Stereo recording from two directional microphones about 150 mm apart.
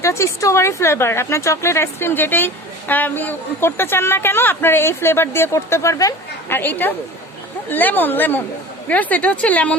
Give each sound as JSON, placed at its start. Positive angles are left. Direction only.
{"t": 0.0, "sound": "speech", "side_deg": 20}